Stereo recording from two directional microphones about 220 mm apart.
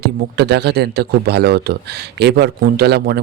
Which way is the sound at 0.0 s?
50° right (ahead or behind).